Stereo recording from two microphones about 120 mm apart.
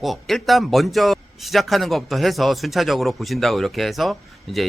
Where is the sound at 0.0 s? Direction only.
Centre (ahead or behind).